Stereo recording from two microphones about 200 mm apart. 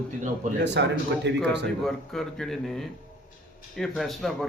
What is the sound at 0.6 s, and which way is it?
Speech, 60° right (ahead or behind).